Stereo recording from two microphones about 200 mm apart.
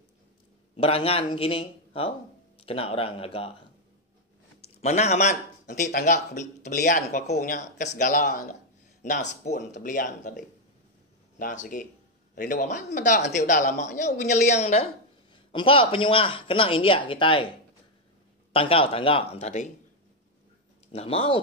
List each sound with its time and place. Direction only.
0.7 s speech: 30° left (ahead or behind)
4.6 s speech: 35° left (ahead or behind)
18.5 s speech: 25° left (ahead or behind)
20.9 s speech: 30° left (ahead or behind)